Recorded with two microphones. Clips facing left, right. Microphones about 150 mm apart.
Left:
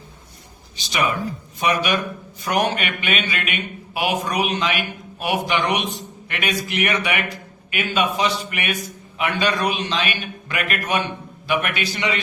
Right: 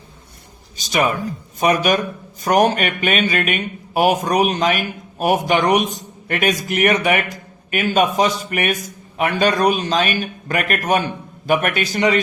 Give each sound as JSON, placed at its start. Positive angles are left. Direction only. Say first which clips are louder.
{"t": 0.8, "sound": "a man's voice", "louder": "right 4 dB", "side_deg": -45}